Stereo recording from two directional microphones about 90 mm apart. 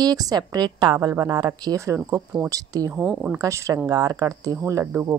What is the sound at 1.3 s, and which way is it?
Speech, 45° right (ahead or behind).